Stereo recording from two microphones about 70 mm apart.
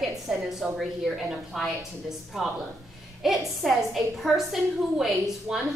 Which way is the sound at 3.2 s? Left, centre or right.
Centre.